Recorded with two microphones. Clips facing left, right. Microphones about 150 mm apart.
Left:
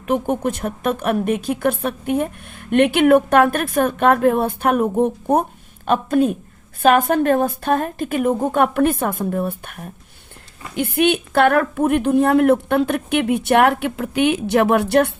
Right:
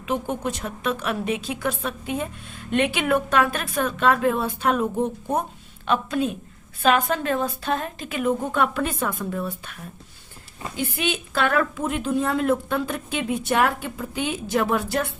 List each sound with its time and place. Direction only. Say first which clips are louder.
0.0 s a woman's voice: left 6 dB; 55° left (ahead or behind)